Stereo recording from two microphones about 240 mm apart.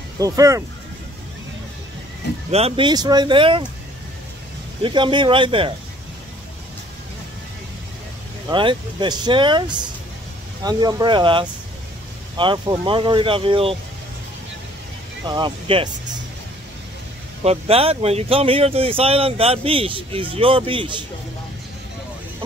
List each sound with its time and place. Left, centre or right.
0.2 s speech: centre
2.5 s speech: right
4.8 s speech: centre
8.5 s speech: centre
15.2 s speech: centre
17.4 s speech: right